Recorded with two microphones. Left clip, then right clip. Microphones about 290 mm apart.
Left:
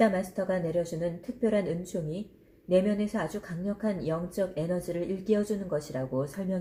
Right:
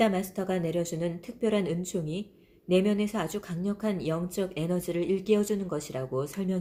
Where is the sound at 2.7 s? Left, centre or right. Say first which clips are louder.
Even; right.